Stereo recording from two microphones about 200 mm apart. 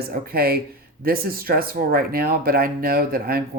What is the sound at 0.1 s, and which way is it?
Speech, 50° right (ahead or behind).